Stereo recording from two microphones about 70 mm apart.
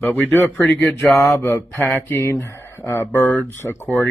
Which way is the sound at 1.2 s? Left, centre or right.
Left.